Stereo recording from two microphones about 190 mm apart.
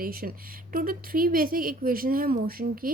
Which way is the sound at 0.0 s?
50° right (ahead or behind).